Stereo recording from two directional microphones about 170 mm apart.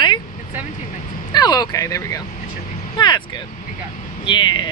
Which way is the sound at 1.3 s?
25° left (ahead or behind).